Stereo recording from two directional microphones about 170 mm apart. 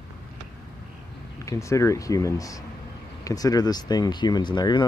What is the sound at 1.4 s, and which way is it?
Speech, 20° left (ahead or behind).